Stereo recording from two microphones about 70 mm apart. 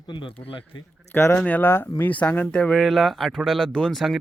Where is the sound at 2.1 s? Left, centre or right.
Left; by 4.2 s centre.